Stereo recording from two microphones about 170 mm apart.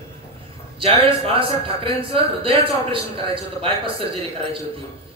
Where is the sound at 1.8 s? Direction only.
35° right (ahead or behind).